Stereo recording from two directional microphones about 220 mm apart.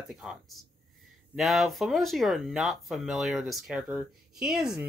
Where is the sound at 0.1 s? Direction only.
Centre (ahead or behind).